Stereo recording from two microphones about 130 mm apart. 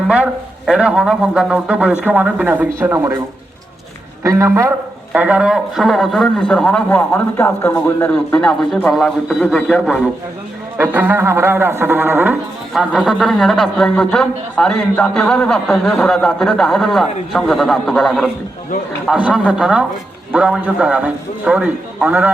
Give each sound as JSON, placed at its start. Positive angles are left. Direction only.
{"t": 0.6, "sound": "a man's voice", "side_deg": -5}
{"t": 4.2, "sound": "a man's voice", "side_deg": -20}
{"t": 10.8, "sound": "a man's voice", "side_deg": -15}